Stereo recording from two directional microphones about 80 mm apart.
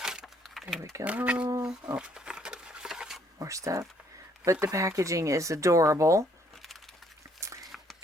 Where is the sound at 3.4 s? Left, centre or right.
Right.